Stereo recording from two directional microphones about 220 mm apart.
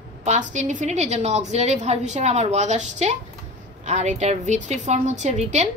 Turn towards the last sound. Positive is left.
turn(degrees=-30)  # may be behind; listen again after turning